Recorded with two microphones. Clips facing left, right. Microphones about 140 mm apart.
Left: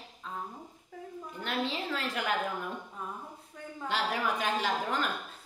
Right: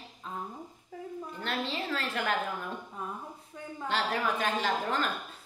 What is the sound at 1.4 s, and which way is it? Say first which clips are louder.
Speech: left 1 dB; 10° left (ahead or behind).